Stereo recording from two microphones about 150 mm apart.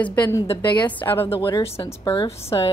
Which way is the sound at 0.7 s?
30° left (ahead or behind).